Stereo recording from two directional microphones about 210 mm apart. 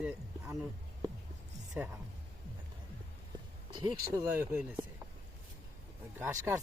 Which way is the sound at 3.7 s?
20° right (ahead or behind).